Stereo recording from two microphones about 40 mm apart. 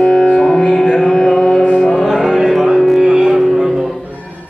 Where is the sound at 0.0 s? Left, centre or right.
Left.